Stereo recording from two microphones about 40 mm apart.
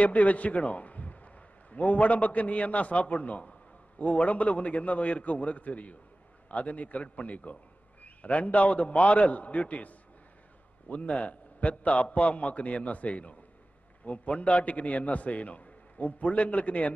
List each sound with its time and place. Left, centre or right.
0.0 s a man's voice: left